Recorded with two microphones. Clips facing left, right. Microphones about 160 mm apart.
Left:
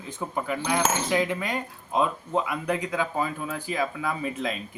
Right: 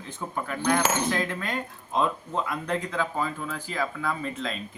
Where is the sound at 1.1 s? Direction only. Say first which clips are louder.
Left 3 dB; 10° left (ahead or behind).